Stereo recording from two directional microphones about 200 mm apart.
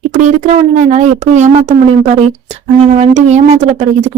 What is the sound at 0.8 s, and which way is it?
Speech, 35° right (ahead or behind).